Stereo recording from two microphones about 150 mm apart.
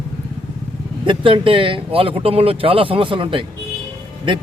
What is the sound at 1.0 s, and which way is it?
A man's voice, 35° right (ahead or behind).